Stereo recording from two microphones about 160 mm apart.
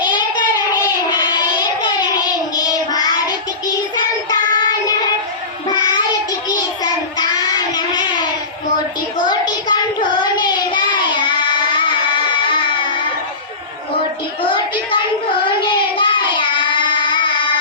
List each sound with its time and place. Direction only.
0.0 s child singing: 25° left (ahead or behind)
14.4 s a sound: 30° left (ahead or behind)
15.4 s child singing: 30° left (ahead or behind)